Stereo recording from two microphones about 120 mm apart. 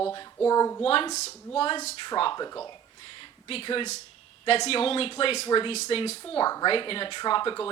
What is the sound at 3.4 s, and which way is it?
Speech, 50° left (ahead or behind).